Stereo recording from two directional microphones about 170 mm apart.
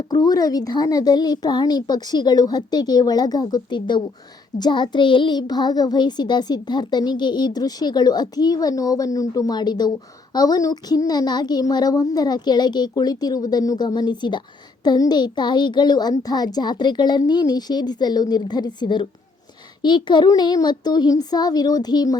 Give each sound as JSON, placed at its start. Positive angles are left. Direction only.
{"t": 0.1, "sound": "a child's voice", "side_deg": 20}